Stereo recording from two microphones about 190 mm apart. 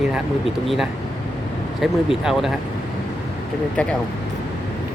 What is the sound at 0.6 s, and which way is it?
Speech, centre (ahead or behind).